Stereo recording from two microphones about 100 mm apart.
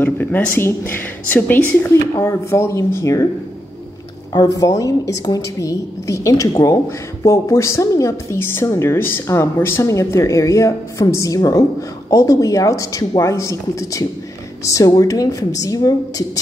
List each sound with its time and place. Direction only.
0.0 s speech: 20° left (ahead or behind)
4.3 s speech: 40° left (ahead or behind)